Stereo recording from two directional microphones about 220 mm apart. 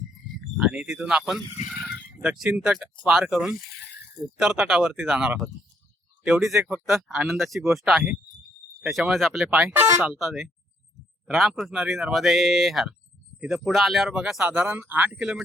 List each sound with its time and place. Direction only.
0.5 s speech: 5° right (ahead or behind)
1.6 s a sound: centre (ahead or behind)
2.2 s speech: 5° right (ahead or behind)
3.8 s a sound: 50° left (ahead or behind)
4.4 s speech: centre (ahead or behind)
6.6 s speech: 10° right (ahead or behind)
6.9 s speech: centre (ahead or behind)
10.0 s speech: centre (ahead or behind)